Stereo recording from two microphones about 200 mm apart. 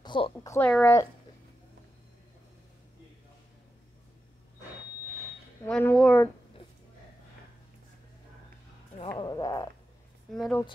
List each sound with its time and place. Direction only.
0.0 s a woman's voice: 20° left (ahead or behind)
5.7 s speech: 5° left (ahead or behind)
9.2 s frog: 20° left (ahead or behind)
10.3 s speech: 5° left (ahead or behind)